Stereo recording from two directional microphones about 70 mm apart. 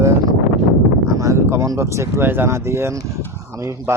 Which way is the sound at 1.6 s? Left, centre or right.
Right.